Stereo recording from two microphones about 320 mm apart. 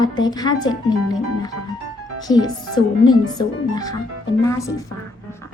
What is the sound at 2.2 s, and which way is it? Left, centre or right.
Speech, centre.